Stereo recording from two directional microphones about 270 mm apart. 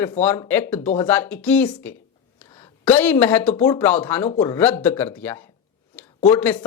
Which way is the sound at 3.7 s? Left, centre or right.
Centre.